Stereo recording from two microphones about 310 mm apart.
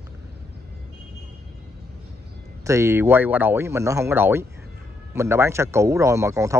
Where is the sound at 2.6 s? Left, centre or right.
Centre.